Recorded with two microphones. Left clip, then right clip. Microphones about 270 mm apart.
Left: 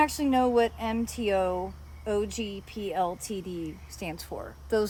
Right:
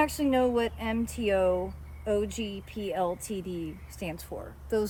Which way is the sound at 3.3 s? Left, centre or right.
Left.